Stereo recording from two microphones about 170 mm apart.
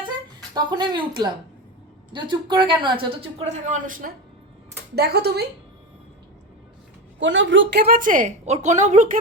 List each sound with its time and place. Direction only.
0.5 s speech: 25° right (ahead or behind); by 4.1 s 55° right (ahead or behind)
4.9 s speech: 70° right (ahead or behind)
7.2 s a woman's voice: 90° right; by 9.0 s 45° right (ahead or behind)